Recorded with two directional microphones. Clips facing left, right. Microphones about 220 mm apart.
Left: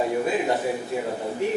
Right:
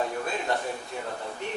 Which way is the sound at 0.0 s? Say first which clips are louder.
Left 7 dB; 10° left (ahead or behind).